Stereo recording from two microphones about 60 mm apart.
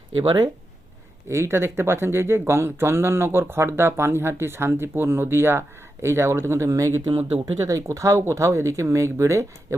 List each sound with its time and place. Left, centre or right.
1.3 s speech: right